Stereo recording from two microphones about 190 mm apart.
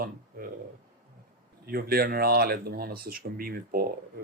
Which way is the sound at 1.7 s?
55° right (ahead or behind).